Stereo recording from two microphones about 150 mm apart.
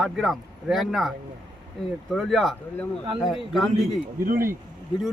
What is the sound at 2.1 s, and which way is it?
Speech, 5° left (ahead or behind).